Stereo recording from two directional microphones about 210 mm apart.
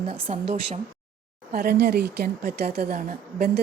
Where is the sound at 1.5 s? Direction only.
45° right (ahead or behind).